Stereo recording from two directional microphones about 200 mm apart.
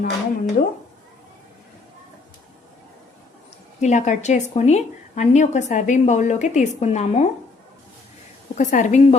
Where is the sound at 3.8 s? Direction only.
35° left (ahead or behind).